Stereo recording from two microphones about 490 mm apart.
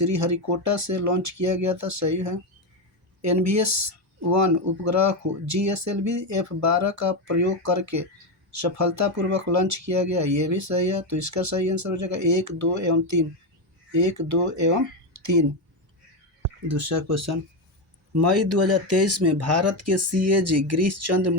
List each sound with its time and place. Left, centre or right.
0.0 s speech: right
16.7 s speech: right